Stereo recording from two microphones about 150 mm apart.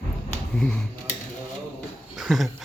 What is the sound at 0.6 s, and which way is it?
Speech, 5° left (ahead or behind).